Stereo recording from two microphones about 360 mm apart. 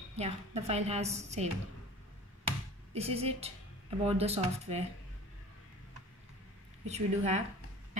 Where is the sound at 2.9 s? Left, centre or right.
Centre.